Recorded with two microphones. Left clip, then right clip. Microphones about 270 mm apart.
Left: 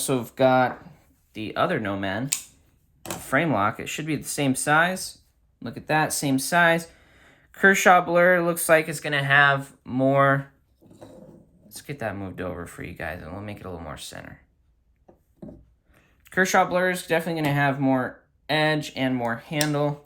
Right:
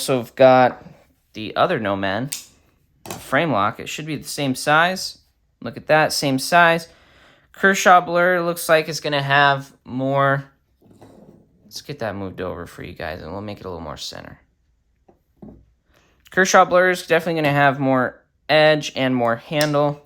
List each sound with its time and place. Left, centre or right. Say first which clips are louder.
0.0 s speech: right 7 dB; right
3.2 s speech: right 4 dB; centre
5.5 s speech: right 7 dB; right
11.7 s speech: right 4 dB; centre
16.0 s speech: right 5 dB; centre